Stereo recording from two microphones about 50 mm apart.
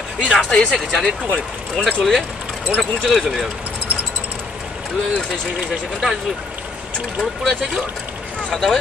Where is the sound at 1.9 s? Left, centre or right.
Centre.